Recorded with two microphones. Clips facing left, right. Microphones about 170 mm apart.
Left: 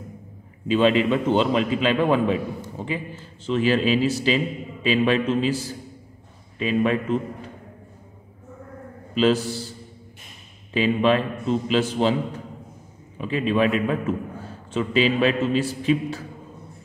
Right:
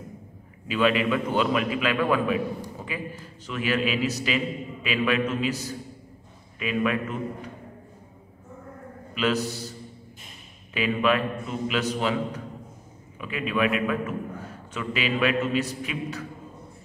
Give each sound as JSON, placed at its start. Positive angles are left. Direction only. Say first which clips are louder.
{"t": 0.7, "sound": "a man's voice", "louder": "left 4 dB", "side_deg": 25}
{"t": 9.1, "sound": "a man's voice", "louder": "left 6 dB", "side_deg": 30}
{"t": 10.7, "sound": "a man's voice", "louder": "left 4 dB", "side_deg": 30}